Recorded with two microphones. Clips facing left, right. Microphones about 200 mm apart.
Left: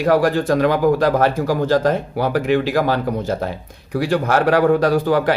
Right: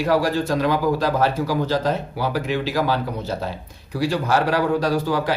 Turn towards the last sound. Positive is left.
turn(degrees=55)  # may be behind; listen again after turning